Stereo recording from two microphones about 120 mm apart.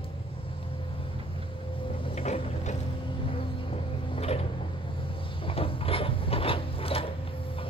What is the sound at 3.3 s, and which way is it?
Creak, 55° left (ahead or behind).